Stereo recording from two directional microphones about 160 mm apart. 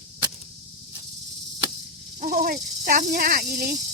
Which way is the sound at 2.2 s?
65° right (ahead or behind).